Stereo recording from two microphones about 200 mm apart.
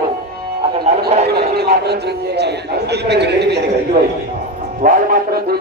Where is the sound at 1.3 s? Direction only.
55° right (ahead or behind).